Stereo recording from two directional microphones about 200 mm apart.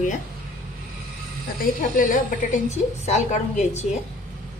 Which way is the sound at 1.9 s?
40° left (ahead or behind).